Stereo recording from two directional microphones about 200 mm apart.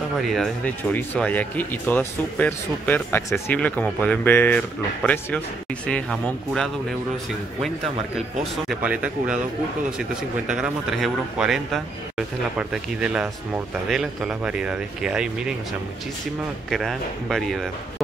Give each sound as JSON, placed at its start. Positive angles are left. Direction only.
{"t": 0.2, "sound": "a man's voice", "side_deg": 0}
{"t": 8.6, "sound": "a man's voice", "side_deg": -5}
{"t": 10.5, "sound": "a man's voice", "side_deg": -5}
{"t": 16.7, "sound": "a man's voice", "side_deg": 0}